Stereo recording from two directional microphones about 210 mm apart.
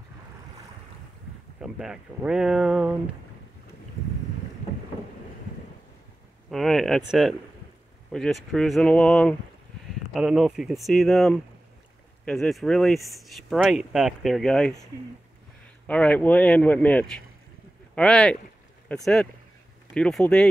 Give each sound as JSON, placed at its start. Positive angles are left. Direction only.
{"t": 1.6, "sound": "speech", "side_deg": -5}
{"t": 6.5, "sound": "speech", "side_deg": 0}
{"t": 15.9, "sound": "speech", "side_deg": 5}